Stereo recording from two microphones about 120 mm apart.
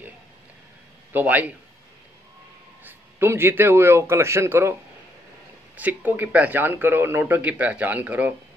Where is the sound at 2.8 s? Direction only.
20° right (ahead or behind).